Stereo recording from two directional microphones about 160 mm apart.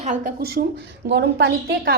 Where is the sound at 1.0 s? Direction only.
90° right.